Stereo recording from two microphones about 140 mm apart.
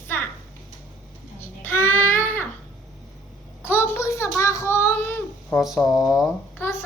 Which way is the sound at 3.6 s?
15° left (ahead or behind).